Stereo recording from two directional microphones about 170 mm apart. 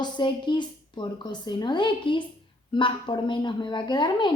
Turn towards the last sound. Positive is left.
turn(degrees=25)  # may be behind; listen again after turning